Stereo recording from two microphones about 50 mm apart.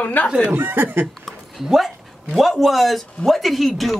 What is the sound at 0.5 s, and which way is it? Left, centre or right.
Speech, right.